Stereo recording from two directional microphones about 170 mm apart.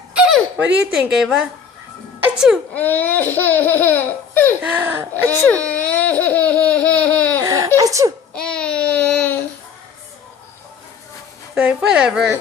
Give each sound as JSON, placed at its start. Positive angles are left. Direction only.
{"t": 0.1, "sound": "a sound", "side_deg": -5}
{"t": 0.5, "sound": "a woman's voice", "side_deg": -5}
{"t": 2.2, "sound": "music", "side_deg": -5}
{"t": 2.7, "sound": "laughter", "side_deg": 10}
{"t": 4.6, "sound": "speech", "side_deg": -10}
{"t": 5.1, "sound": "laughter", "side_deg": 10}
{"t": 7.4, "sound": "a sound", "side_deg": -20}
{"t": 8.3, "sound": "a sound", "side_deg": 5}
{"t": 11.5, "sound": "a woman's voice", "side_deg": -5}